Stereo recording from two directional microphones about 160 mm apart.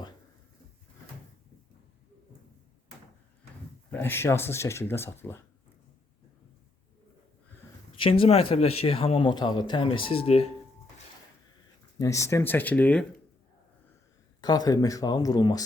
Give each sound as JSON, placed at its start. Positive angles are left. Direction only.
{"t": 3.9, "sound": "speech", "side_deg": 15}
{"t": 7.9, "sound": "a man's voice", "side_deg": 35}
{"t": 11.9, "sound": "speech", "side_deg": 20}
{"t": 14.4, "sound": "speech", "side_deg": 25}